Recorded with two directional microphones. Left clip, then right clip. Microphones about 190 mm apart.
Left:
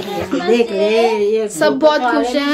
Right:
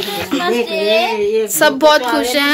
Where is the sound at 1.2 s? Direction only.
55° left (ahead or behind).